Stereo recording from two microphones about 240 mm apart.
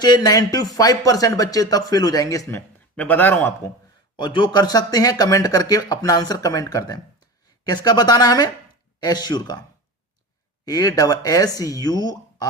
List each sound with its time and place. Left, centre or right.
0.0 s speech: centre
4.2 s speech: centre
10.7 s speech: centre